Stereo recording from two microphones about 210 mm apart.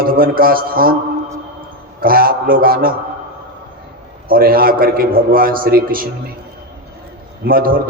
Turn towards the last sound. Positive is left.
turn(degrees=-45)  # may be behind; listen again after turning